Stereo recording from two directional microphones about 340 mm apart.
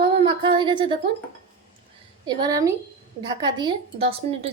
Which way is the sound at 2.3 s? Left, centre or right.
Centre.